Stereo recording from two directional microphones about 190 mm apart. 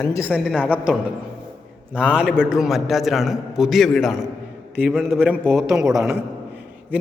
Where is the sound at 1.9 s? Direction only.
5° right (ahead or behind).